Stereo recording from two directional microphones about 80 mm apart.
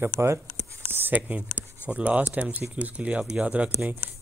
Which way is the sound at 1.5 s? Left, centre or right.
Left.